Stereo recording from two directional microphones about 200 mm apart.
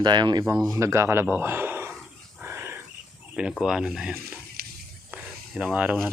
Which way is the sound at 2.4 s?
10° right (ahead or behind).